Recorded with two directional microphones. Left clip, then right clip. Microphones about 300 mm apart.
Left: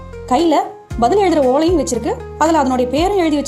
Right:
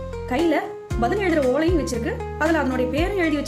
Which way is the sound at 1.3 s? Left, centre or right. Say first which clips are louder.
Left 6 dB; centre.